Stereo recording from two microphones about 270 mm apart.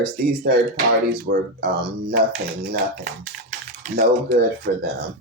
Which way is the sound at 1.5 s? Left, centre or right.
Right.